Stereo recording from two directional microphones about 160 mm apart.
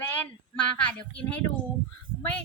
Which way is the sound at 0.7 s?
10° left (ahead or behind).